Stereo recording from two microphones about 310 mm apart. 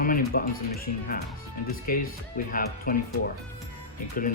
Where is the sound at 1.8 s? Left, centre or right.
Left.